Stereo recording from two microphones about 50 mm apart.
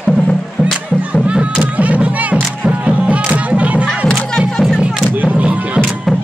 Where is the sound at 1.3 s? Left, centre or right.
Right.